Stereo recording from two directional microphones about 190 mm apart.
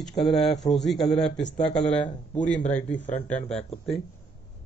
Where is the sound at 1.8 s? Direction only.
35° left (ahead or behind).